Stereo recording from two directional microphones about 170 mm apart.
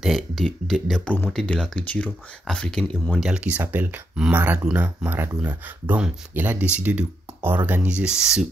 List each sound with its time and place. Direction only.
0.0 s speech: centre (ahead or behind)